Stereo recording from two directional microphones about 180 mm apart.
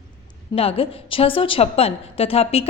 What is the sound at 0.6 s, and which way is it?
A woman's voice, 30° left (ahead or behind).